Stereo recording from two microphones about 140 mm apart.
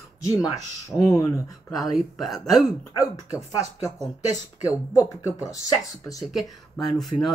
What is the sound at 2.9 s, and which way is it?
Speech, 25° left (ahead or behind).